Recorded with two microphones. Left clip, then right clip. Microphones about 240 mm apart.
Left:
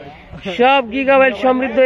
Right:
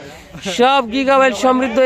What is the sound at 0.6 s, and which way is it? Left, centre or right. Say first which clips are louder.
Speech: even; right.